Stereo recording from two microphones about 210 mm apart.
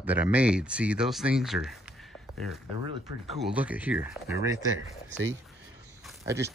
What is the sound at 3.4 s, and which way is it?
Speech, 5° right (ahead or behind).